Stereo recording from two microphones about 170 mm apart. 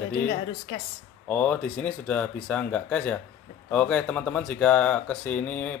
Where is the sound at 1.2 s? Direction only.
10° left (ahead or behind).